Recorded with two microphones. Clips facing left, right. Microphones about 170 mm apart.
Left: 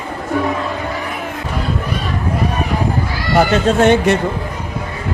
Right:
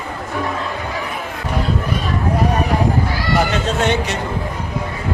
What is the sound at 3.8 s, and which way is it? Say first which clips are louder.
Speech: left 9 dB; 55° left (ahead or behind).